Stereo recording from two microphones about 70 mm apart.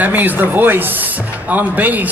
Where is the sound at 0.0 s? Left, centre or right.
Right.